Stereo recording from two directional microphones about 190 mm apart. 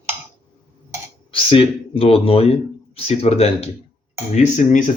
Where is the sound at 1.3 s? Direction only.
30° left (ahead or behind).